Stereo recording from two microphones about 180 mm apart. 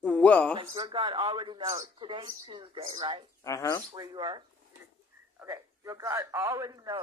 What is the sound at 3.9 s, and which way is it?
A man's voice, 20° right (ahead or behind).